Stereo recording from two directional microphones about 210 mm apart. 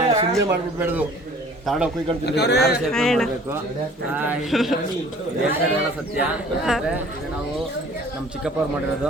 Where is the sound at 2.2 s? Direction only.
55° left (ahead or behind).